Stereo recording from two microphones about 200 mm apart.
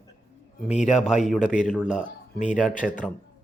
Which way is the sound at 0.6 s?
35° left (ahead or behind).